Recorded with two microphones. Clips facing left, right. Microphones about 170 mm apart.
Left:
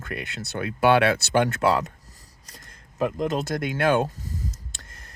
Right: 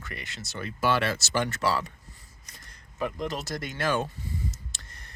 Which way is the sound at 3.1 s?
50° left (ahead or behind).